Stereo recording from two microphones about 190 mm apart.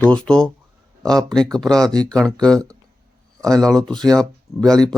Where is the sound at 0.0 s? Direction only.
5° left (ahead or behind).